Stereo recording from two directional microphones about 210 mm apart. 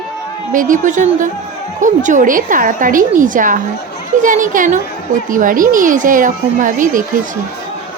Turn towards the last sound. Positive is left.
turn(degrees=-40)  # may be behind; listen again after turning